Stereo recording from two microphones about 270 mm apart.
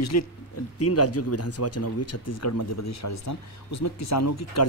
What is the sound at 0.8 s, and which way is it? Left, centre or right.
Speech, left.